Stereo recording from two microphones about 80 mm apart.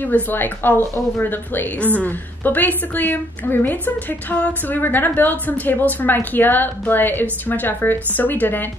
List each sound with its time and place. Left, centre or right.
0.0 s a woman's voice: left